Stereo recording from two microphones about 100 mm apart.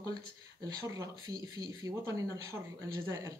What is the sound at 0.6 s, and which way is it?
Speech, 35° right (ahead or behind).